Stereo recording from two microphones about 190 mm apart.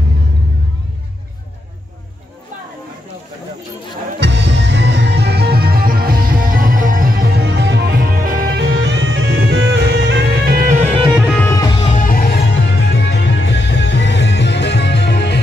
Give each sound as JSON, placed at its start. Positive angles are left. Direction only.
{"t": 4.2, "sound": "music", "side_deg": -65}
{"t": 11.2, "sound": "music", "side_deg": 10}
{"t": 11.9, "sound": "music", "side_deg": 45}